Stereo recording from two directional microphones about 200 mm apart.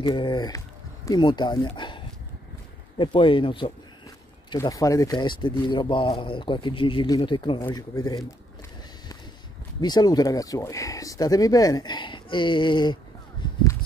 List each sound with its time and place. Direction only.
0.0 s speech: 25° left (ahead or behind)
9.8 s speech: 20° left (ahead or behind)
13.4 s a sound: 25° left (ahead or behind)